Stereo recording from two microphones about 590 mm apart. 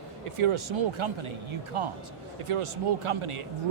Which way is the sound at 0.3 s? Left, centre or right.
Right.